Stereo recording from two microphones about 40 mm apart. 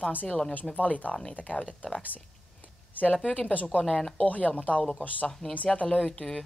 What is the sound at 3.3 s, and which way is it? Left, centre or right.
Speech, left.